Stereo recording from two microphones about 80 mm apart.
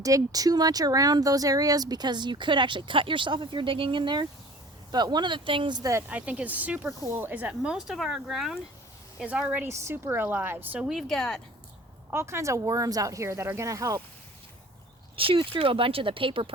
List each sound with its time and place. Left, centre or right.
0.0 s speech: right
4.9 s speech: right
5.8 s speech: right
6.1 s a woman's voice: centre
7.6 s speech: centre
9.6 s a woman's voice: right
10.8 s speech: centre
12.1 s speech: right
13.7 s speech: right
15.2 s speech: right